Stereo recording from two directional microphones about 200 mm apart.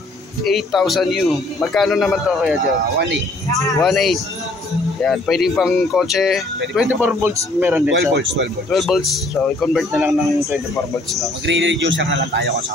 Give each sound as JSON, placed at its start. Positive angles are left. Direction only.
{"t": 0.4, "sound": "speech", "side_deg": 0}
{"t": 3.8, "sound": "speech", "side_deg": 0}
{"t": 8.1, "sound": "speech", "side_deg": -60}
{"t": 8.6, "sound": "speech", "side_deg": 0}
{"t": 11.4, "sound": "speech", "side_deg": -65}